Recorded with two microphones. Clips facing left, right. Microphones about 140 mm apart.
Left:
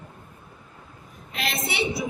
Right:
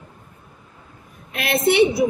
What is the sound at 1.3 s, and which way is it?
Speech, 60° right (ahead or behind).